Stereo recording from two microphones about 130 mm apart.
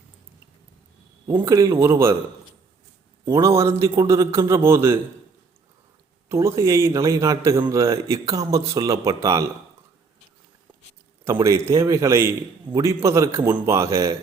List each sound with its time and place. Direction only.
1.5 s a man's voice: 25° right (ahead or behind)
3.2 s a man's voice: 25° right (ahead or behind)
6.2 s a man's voice: 20° right (ahead or behind)
11.3 s a man's voice: 20° right (ahead or behind)